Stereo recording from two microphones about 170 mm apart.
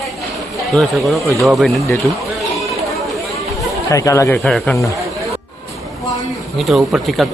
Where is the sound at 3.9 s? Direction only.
20° left (ahead or behind).